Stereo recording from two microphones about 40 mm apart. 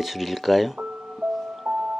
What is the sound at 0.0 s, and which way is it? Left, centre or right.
Speech, centre.